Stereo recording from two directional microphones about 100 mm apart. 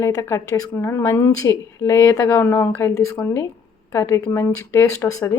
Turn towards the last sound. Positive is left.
turn(degrees=30)  # may be behind; listen again after turning